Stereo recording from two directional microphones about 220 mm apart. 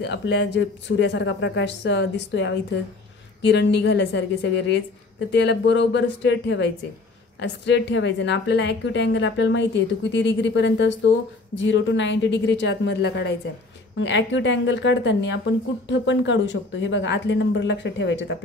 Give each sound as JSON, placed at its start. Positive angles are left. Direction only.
{"t": 0.0, "sound": "a woman's voice", "side_deg": 55}